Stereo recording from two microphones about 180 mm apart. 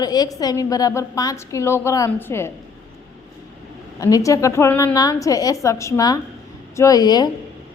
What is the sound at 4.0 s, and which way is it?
A woman's voice, 20° left (ahead or behind).